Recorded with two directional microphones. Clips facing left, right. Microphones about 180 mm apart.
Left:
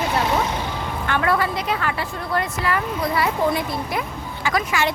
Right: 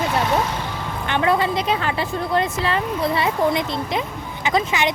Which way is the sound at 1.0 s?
20° right (ahead or behind).